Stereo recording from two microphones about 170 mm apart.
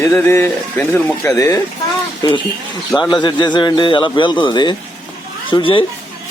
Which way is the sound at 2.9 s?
5° left (ahead or behind).